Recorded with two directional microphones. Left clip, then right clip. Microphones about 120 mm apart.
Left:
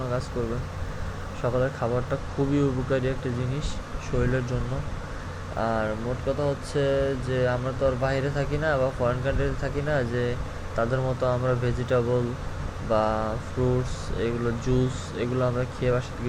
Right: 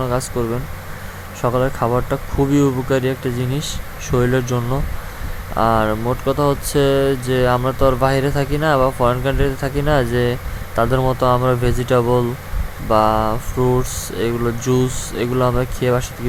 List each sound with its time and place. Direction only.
0.4 s speech: 45° right (ahead or behind)
4.2 s speech: 70° right (ahead or behind)
5.5 s speech: 55° right (ahead or behind)